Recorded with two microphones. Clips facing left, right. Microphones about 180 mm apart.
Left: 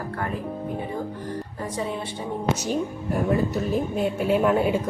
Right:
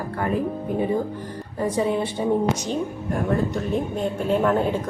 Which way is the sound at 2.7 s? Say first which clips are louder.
Even; 5° left (ahead or behind).